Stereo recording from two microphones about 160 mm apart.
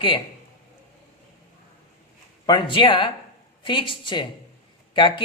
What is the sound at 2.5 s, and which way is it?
A woman's voice, 30° left (ahead or behind).